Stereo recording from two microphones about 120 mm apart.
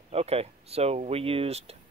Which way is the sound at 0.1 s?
60° right (ahead or behind).